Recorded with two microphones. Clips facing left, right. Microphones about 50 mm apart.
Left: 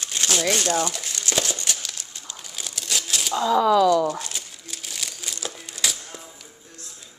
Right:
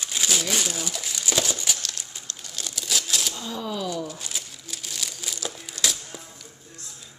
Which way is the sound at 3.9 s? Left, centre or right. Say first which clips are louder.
Left 11 dB; left.